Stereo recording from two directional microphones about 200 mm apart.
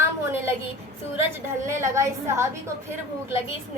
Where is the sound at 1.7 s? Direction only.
15° right (ahead or behind).